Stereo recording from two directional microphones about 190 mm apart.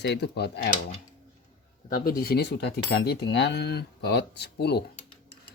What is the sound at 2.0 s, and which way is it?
Speech, 50° left (ahead or behind).